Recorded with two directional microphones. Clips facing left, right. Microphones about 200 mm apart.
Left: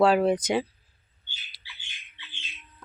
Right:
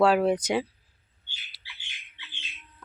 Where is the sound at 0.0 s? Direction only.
5° right (ahead or behind).